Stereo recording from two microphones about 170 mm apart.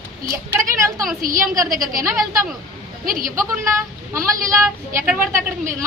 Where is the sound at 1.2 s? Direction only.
55° right (ahead or behind).